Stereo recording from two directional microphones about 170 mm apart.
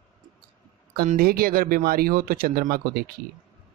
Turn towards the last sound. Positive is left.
turn(degrees=-60)  # may be behind; listen again after turning